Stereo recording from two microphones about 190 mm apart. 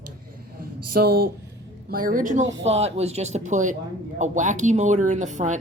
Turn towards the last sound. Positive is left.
turn(degrees=-40)  # may be behind; listen again after turning